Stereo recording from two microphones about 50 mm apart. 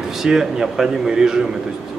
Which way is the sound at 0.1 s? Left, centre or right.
Centre.